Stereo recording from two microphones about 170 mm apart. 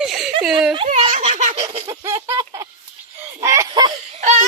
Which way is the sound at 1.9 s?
20° right (ahead or behind).